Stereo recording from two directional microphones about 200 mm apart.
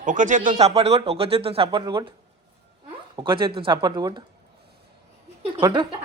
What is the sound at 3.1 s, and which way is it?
Speech, 25° right (ahead or behind).